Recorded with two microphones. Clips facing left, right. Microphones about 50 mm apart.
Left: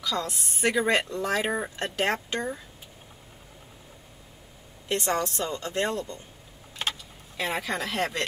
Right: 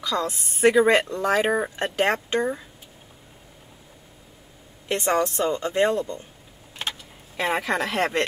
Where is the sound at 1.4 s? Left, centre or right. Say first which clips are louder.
Right 6 dB; centre.